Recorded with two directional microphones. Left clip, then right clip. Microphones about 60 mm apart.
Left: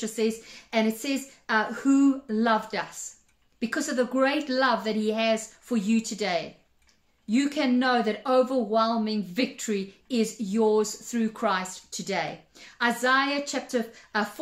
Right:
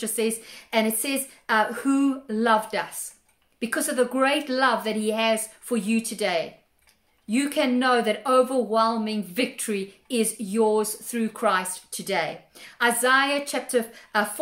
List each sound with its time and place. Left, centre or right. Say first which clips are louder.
0.0 s a woman's voice: right 1 dB; right